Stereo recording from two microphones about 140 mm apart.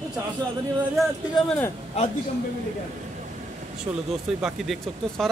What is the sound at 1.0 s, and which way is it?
Speech, 5° left (ahead or behind).